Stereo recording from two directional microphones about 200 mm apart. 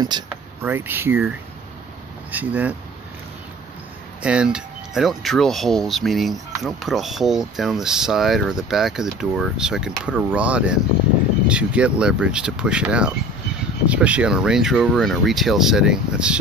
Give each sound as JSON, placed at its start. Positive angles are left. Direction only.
{"t": 0.0, "sound": "vehicle", "side_deg": -20}
{"t": 0.7, "sound": "speech", "side_deg": -10}
{"t": 2.3, "sound": "speech", "side_deg": -10}
{"t": 4.2, "sound": "speech", "side_deg": -5}